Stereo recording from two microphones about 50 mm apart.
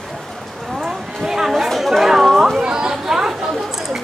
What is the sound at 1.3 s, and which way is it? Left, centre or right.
Speech, centre.